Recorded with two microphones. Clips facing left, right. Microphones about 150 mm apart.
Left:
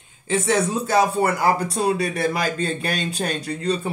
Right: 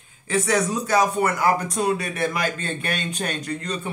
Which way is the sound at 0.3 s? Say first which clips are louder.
Left 1 dB; 25° left (ahead or behind).